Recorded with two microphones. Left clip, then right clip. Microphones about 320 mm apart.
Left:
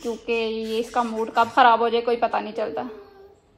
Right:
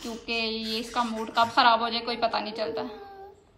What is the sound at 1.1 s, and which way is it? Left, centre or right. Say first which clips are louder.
A woman's voice: left 5 dB; right.